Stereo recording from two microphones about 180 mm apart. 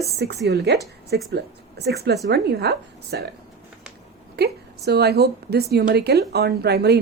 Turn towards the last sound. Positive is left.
turn(degrees=-65)  # may be behind; listen again after turning